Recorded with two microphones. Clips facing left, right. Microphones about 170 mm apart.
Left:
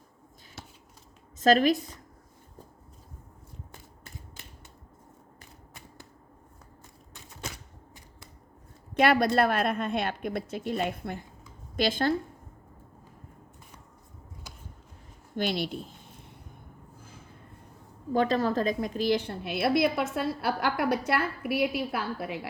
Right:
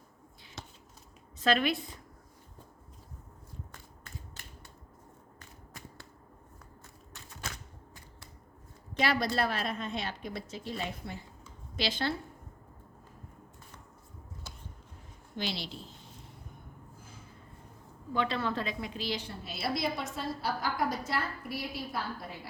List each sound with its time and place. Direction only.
1.4 s a woman's voice: 40° left (ahead or behind)
9.0 s a woman's voice: 55° left (ahead or behind)
15.4 s a woman's voice: 55° left (ahead or behind)
18.1 s a woman's voice: 45° left (ahead or behind); by 22.4 s 80° left